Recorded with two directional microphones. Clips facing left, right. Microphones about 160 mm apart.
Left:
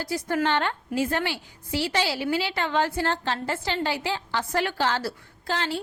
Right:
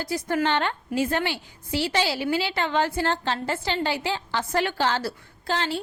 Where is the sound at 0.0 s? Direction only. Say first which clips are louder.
Right 1 dB; 20° right (ahead or behind).